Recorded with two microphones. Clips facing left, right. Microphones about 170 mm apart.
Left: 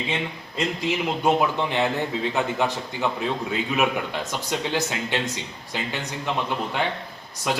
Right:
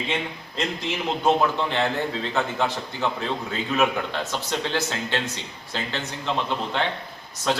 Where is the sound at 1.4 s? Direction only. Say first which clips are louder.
Even; 15° left (ahead or behind).